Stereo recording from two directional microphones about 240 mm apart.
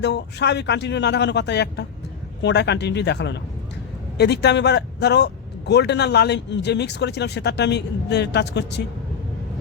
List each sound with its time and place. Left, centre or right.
0.0 s speech: left